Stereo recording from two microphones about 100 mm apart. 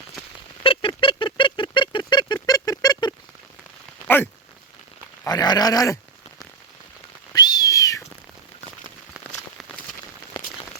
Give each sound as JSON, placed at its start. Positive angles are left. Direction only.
{"t": 0.6, "sound": "patter", "side_deg": 60}
{"t": 1.0, "sound": "rodents", "side_deg": 55}
{"t": 4.0, "sound": "a sound", "side_deg": 20}
{"t": 5.2, "sound": "dog", "side_deg": 40}
{"t": 7.3, "sound": "whistle", "side_deg": 40}
{"t": 10.3, "sound": "a sound", "side_deg": 50}